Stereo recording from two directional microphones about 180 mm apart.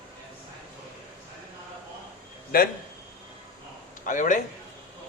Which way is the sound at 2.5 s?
55° left (ahead or behind).